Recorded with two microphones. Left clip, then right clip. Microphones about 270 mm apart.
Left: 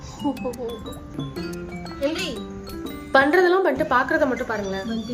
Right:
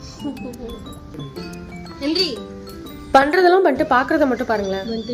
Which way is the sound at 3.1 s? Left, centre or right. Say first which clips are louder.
Right 4 dB; centre.